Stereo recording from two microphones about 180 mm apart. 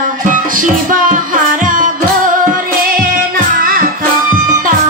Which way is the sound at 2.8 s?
50° right (ahead or behind).